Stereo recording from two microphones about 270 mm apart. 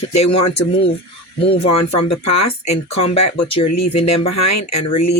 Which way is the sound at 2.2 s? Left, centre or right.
Left.